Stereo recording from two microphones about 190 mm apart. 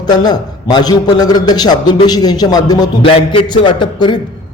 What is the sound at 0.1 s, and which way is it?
A man's voice, 20° left (ahead or behind).